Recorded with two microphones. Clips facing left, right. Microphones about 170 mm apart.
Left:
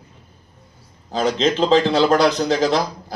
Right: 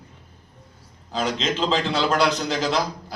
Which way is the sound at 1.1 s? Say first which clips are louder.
Left 6 dB; 40° left (ahead or behind).